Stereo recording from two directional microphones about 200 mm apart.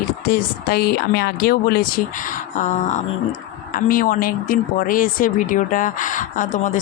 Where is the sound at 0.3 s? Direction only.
45° left (ahead or behind).